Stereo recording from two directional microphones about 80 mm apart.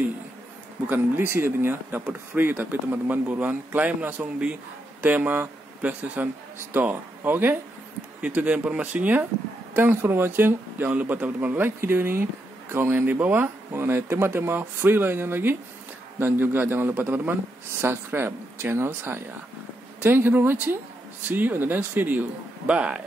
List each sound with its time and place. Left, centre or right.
0.8 s speech: right